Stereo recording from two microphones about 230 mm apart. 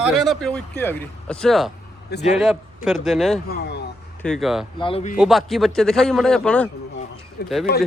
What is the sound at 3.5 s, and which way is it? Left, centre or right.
Speech, left.